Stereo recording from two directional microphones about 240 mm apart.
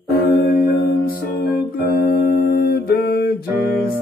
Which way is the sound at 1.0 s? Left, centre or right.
Left.